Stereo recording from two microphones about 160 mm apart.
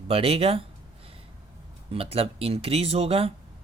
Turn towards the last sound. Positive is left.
turn(degrees=-40)  # may be behind; listen again after turning